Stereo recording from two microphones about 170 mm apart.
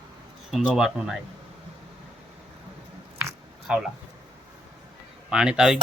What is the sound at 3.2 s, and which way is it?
Biting, 10° right (ahead or behind).